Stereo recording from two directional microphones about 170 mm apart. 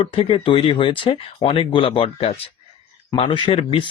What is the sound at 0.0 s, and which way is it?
Speech, 30° left (ahead or behind).